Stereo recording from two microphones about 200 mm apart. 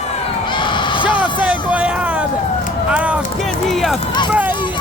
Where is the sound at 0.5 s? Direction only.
25° left (ahead or behind).